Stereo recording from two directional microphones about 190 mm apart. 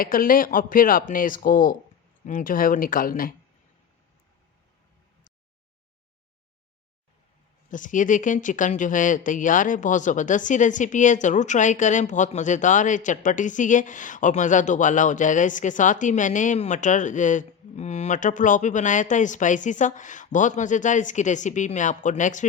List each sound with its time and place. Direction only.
0.0 s speech: 50° left (ahead or behind)
7.7 s speech: 45° left (ahead or behind)